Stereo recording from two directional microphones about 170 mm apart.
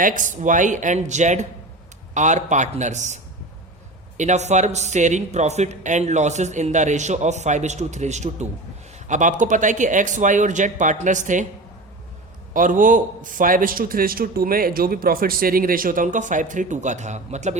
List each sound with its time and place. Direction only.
0.0 s a man's voice: 50° right (ahead or behind)
4.2 s a man's voice: 45° right (ahead or behind)
12.5 s a man's voice: 50° right (ahead or behind)